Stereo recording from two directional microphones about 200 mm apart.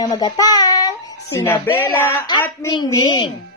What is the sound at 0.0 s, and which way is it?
Child singing, 20° left (ahead or behind).